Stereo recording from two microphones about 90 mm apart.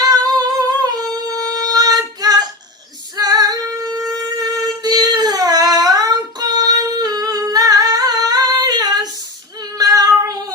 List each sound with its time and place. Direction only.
0.0 s singing: 45° right (ahead or behind)
0.9 s child singing: 45° right (ahead or behind)
3.2 s female singing: 45° right (ahead or behind)
4.4 s humming: 45° right (ahead or behind)
9.7 s child singing: 45° right (ahead or behind)